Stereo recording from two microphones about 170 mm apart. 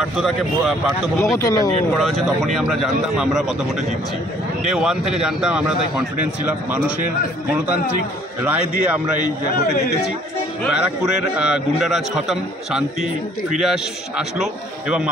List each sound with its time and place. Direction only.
0.0 s a man's voice: centre (ahead or behind)
1.4 s speech: 20° left (ahead or behind)
2.0 s a man's voice: centre (ahead or behind)
4.6 s a man's voice: 5° right (ahead or behind)
8.5 s a man's voice: 10° right (ahead or behind)
10.7 s a man's voice: 5° right (ahead or behind)